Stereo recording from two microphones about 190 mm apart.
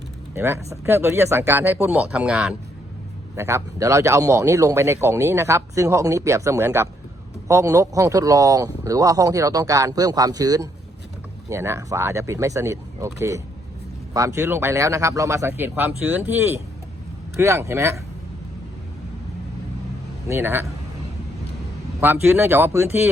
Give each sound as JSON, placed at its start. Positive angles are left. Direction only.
{"t": 0.3, "sound": "a man's voice", "side_deg": -15}
{"t": 20.2, "sound": "a man's voice", "side_deg": -15}
{"t": 22.0, "sound": "a man's voice", "side_deg": -10}